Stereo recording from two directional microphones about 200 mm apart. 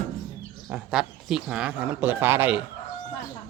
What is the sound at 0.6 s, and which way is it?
Speech, 5° right (ahead or behind).